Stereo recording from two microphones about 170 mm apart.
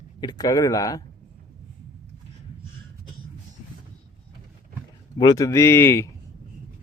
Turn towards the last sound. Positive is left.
turn(degrees=15)  # may be behind; listen again after turning